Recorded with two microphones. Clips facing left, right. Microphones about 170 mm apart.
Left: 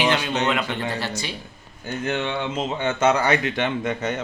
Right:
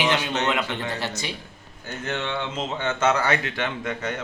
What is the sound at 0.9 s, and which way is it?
Speech, 20° right (ahead or behind).